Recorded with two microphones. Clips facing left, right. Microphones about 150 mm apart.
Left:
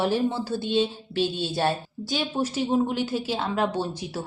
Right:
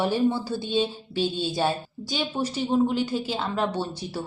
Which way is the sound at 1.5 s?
Centre (ahead or behind).